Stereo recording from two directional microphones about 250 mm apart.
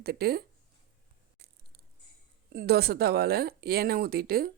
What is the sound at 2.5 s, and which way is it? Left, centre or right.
Speech, right.